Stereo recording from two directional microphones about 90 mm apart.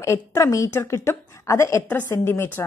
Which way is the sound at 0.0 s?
35° left (ahead or behind).